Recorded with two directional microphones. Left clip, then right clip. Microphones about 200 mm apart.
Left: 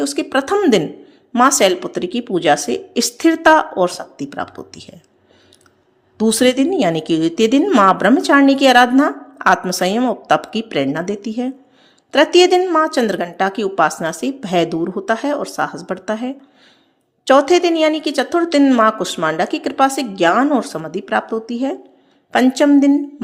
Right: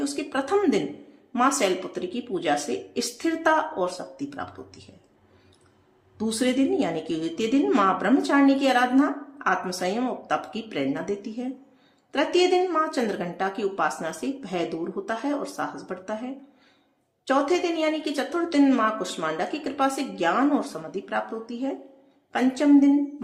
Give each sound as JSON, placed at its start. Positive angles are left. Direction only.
{"t": 0.0, "sound": "a woman's voice", "side_deg": 40}
{"t": 6.1, "sound": "a woman's voice", "side_deg": 40}